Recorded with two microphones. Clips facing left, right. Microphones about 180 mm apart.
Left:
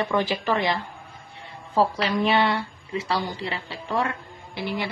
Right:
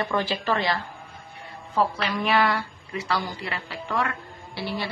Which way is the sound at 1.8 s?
30° left (ahead or behind).